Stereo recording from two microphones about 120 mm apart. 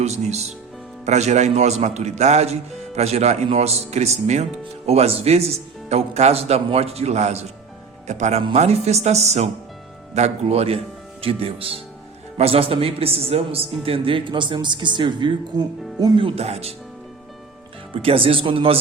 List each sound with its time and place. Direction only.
0.0 s a man's voice: 65° right (ahead or behind); by 16.2 s 35° right (ahead or behind)
16.2 s a man's voice: 55° right (ahead or behind)
17.9 s a man's voice: 50° right (ahead or behind)